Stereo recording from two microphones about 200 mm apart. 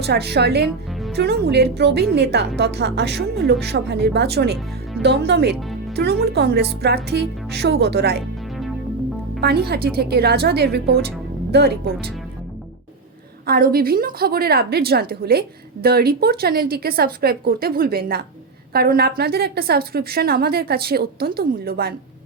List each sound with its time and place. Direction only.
0.0 s speech: 55° right (ahead or behind)
9.4 s a woman's voice: 50° right (ahead or behind)
13.5 s a woman's voice: 50° right (ahead or behind)